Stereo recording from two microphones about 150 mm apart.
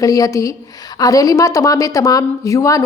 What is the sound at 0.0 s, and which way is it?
Speech, 25° left (ahead or behind).